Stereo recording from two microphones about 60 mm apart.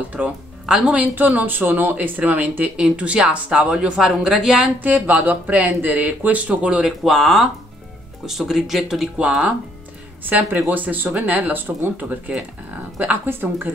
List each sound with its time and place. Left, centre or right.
0.7 s a woman's voice: centre
0.9 s speech: right
2.8 s a woman's voice: centre
4.7 s speech: right
7.1 s speech: centre
10.7 s speech: right